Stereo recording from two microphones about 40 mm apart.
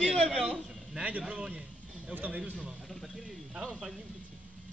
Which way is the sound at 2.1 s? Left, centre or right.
Right.